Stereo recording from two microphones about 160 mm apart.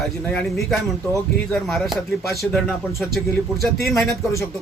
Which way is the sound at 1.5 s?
Centre (ahead or behind).